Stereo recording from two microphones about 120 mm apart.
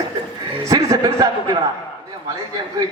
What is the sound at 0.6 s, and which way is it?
Speech, 25° right (ahead or behind).